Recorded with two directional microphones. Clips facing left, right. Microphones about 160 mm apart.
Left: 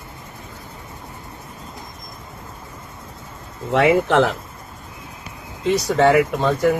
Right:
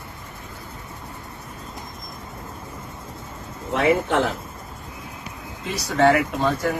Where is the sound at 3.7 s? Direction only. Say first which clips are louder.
Left 4 dB; 80° left.